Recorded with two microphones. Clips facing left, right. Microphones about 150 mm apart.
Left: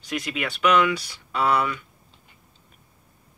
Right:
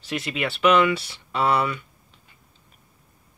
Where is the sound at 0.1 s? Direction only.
Centre (ahead or behind).